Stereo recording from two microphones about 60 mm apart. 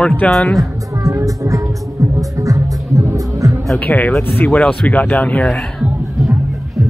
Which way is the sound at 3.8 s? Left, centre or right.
Left.